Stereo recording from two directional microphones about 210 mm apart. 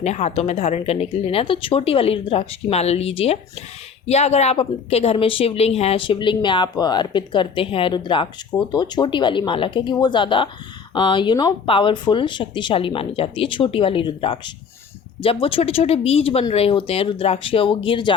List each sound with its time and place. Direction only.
0.0 s speech: 30° left (ahead or behind)